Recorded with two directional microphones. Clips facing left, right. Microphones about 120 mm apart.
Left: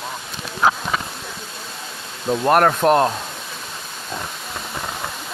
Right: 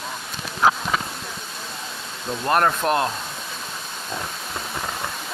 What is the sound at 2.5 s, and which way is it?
Speech, 45° left (ahead or behind).